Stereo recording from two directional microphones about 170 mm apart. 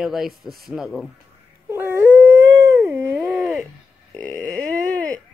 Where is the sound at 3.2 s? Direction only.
5° right (ahead or behind).